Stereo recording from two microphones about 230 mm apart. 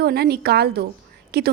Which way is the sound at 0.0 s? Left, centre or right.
Right.